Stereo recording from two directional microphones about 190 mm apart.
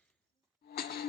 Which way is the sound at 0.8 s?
55° left (ahead or behind).